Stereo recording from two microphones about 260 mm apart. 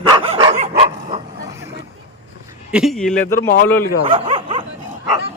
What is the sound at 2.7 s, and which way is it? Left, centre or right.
Speech, centre.